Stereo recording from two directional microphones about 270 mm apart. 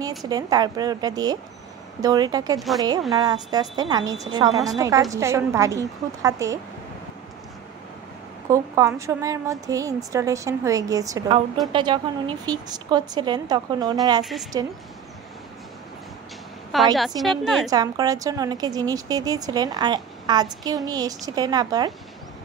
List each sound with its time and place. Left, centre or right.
0.2 s a woman's voice: centre
8.5 s a woman's voice: centre
14.2 s a woman's voice: centre
16.7 s a woman's voice: centre
17.6 s a woman's voice: centre